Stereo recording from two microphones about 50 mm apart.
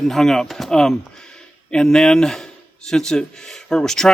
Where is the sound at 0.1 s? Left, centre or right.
Centre.